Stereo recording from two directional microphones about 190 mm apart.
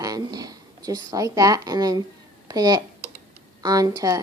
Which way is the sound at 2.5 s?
20° right (ahead or behind).